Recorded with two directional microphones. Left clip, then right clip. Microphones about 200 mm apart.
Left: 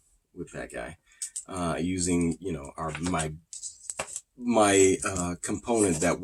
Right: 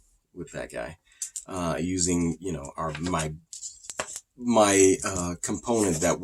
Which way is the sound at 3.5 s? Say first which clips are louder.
Right 1 dB; 15° right (ahead or behind).